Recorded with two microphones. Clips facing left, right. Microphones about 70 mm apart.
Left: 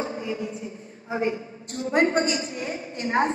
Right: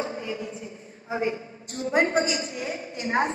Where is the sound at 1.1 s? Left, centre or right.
Left.